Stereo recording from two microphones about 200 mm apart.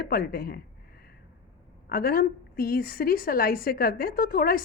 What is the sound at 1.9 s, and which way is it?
A woman's voice, 50° left (ahead or behind).